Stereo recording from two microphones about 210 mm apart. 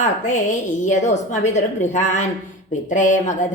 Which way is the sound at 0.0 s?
35° left (ahead or behind).